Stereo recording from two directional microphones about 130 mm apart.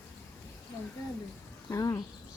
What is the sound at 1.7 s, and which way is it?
Speech, 25° left (ahead or behind).